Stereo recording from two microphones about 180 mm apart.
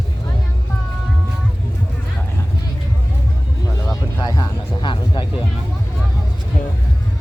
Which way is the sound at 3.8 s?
20° left (ahead or behind).